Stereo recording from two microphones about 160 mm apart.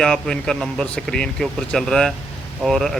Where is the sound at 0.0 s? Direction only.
5° left (ahead or behind).